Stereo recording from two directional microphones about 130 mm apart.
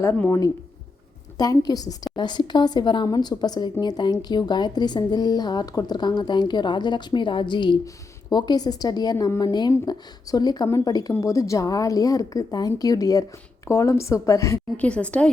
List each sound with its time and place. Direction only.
1.4 s a woman's voice: 25° left (ahead or behind)
14.8 s a woman's voice: 10° left (ahead or behind)